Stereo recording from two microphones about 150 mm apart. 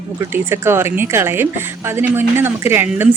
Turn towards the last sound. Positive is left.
turn(degrees=-15)  # may be behind; listen again after turning